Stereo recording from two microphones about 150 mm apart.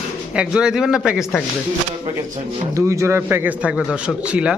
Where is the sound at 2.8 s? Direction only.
20° right (ahead or behind).